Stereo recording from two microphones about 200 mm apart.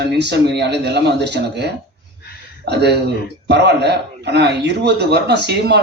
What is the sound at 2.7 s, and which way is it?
Speech, 55° right (ahead or behind).